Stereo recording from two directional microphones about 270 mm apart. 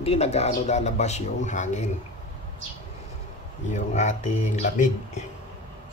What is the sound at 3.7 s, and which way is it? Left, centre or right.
Speech, left.